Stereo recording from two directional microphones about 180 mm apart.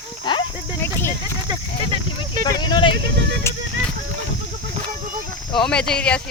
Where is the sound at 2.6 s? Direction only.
25° left (ahead or behind).